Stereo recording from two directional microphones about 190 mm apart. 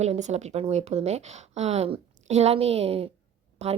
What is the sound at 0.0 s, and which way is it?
A woman's voice, 35° right (ahead or behind).